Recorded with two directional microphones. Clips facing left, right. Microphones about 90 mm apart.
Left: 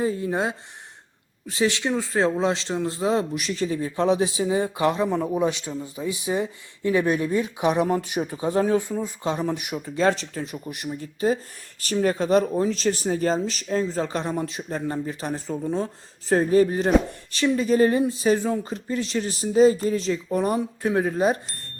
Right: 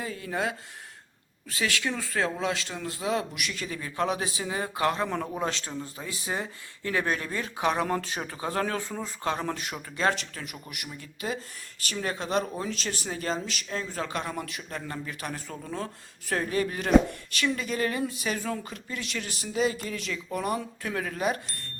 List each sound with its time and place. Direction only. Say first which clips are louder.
0.0 s speech: left 7 dB; 25° left (ahead or behind)
10.2 s speech: left 8 dB; 30° left (ahead or behind)